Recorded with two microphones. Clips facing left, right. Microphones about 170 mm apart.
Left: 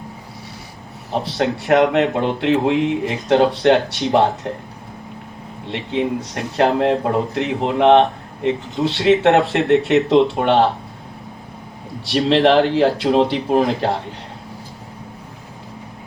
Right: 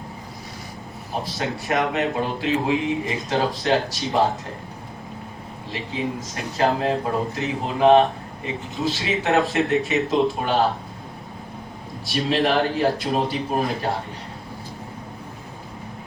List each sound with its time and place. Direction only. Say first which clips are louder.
1.1 s speech: left 7 dB; 65° left (ahead or behind)
5.6 s speech: left 7 dB; 65° left (ahead or behind)
12.0 s speech: left 7 dB; 70° left (ahead or behind)